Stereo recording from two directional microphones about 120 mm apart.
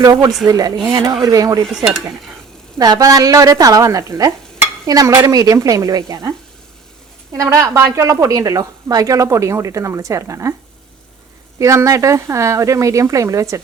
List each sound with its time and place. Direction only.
0.0 s speech: 30° right (ahead or behind)
2.7 s speech: 30° right (ahead or behind)
7.3 s speech: 25° right (ahead or behind)
11.6 s speech: 25° right (ahead or behind)